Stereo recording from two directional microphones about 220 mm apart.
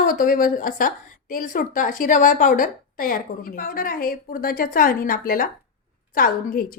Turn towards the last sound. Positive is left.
turn(degrees=40)  # may be behind; listen again after turning